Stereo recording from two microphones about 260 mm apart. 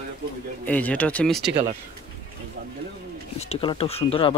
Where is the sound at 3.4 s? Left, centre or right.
Left.